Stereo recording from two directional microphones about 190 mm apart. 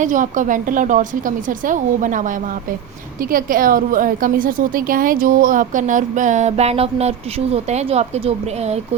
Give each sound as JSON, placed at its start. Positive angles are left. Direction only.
{"t": 0.0, "sound": "a woman's voice", "side_deg": -40}